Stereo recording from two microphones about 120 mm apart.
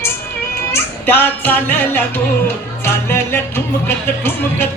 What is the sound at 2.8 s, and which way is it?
Speech, 20° left (ahead or behind).